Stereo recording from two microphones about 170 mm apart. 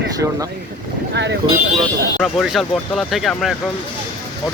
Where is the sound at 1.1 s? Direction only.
90° right.